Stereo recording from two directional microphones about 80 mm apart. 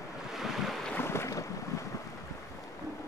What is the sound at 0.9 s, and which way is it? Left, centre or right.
Boat, left.